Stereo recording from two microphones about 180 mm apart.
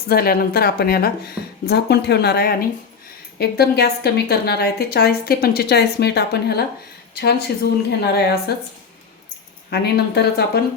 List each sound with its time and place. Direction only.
0.1 s a woman's voice: 60° left (ahead or behind)
9.6 s a woman's voice: 65° left (ahead or behind)